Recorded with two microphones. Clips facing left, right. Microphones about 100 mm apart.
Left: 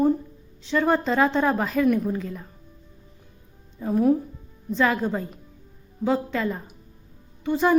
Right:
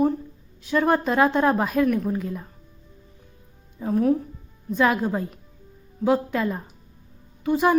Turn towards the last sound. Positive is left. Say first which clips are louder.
# right 1 dB
turn(degrees=-10)  # may be behind; listen again after turning